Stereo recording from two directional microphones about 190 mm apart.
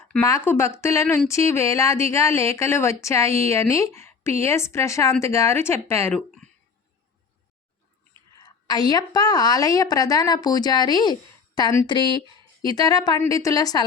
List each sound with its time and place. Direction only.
0.1 s speech: 15° left (ahead or behind)
8.4 s a woman's voice: 20° left (ahead or behind)